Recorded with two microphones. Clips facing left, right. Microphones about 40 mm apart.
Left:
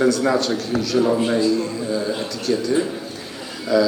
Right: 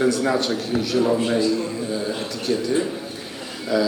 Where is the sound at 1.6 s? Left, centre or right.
Centre.